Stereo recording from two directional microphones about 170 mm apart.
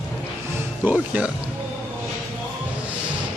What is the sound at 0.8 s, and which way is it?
Speech, 10° right (ahead or behind).